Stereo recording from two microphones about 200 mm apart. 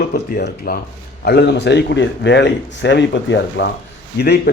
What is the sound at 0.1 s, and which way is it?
Speech, 50° left (ahead or behind).